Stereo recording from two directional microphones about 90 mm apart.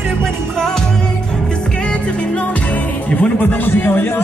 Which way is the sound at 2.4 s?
15° left (ahead or behind).